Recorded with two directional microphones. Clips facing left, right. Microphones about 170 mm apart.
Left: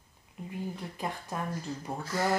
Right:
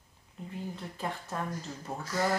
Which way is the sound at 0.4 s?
15° left (ahead or behind).